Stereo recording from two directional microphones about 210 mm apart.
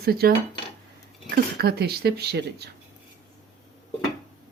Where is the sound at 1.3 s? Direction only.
50° right (ahead or behind).